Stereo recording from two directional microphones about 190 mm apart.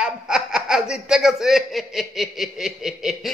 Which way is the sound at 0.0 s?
5° right (ahead or behind).